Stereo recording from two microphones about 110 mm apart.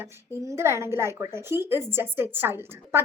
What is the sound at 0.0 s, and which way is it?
A woman's voice, 25° right (ahead or behind).